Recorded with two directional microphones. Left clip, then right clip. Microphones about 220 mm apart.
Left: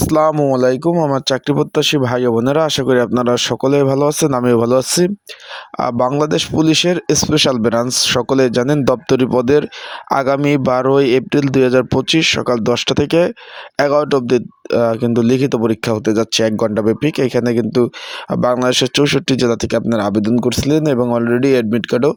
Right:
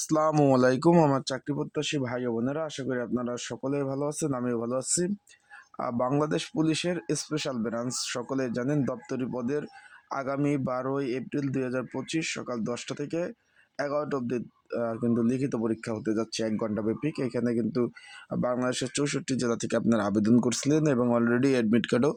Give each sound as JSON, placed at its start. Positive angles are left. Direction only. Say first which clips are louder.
{"t": 0.0, "sound": "speech", "louder": "left 11 dB", "side_deg": 30}
{"t": 0.4, "sound": "speech", "louder": "left 9 dB", "side_deg": 20}
{"t": 1.1, "sound": "speech", "louder": "left 14 dB", "side_deg": 35}